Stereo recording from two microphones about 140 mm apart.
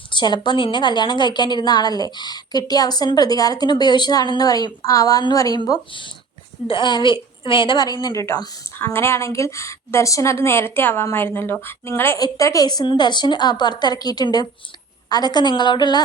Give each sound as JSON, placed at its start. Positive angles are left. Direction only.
{"t": 0.1, "sound": "a woman's voice", "side_deg": 30}
{"t": 8.0, "sound": "a woman's voice", "side_deg": 20}